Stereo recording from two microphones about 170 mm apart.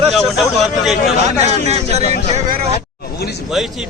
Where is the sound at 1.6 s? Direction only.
40° right (ahead or behind).